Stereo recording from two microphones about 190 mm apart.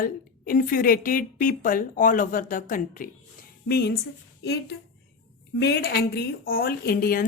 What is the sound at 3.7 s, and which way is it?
Speech, 60° left (ahead or behind).